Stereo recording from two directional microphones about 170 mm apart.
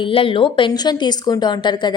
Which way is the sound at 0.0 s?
30° left (ahead or behind).